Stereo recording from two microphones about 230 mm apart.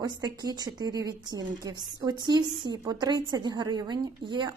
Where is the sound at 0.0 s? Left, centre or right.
Centre.